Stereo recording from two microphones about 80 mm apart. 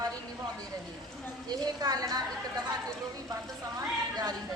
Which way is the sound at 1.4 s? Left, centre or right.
Right.